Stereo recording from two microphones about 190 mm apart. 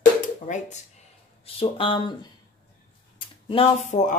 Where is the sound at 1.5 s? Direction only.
30° left (ahead or behind).